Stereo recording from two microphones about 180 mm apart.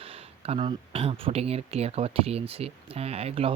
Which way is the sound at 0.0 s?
35° right (ahead or behind).